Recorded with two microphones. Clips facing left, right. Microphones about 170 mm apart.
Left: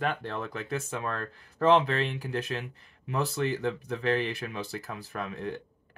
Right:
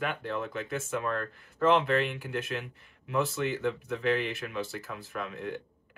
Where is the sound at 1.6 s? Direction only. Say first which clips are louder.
Left 1 dB; 35° left (ahead or behind).